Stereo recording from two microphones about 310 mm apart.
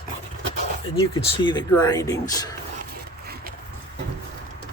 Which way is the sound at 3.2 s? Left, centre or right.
Right.